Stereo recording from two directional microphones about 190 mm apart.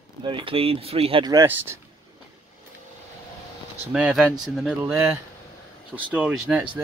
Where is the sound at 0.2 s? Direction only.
25° right (ahead or behind).